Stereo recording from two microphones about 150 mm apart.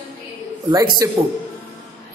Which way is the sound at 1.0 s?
20° right (ahead or behind).